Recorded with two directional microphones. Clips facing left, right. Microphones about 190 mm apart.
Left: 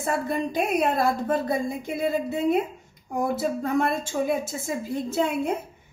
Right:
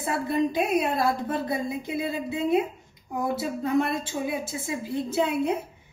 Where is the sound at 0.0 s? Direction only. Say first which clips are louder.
Right 1 dB; 45° left (ahead or behind).